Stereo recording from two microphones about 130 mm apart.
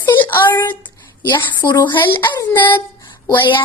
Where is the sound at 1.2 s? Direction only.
35° left (ahead or behind).